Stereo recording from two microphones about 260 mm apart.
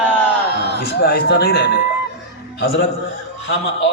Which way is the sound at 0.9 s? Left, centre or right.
Left.